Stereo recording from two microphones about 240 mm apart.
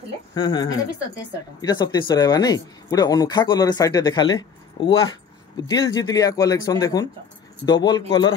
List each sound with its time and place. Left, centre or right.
0.3 s speech: centre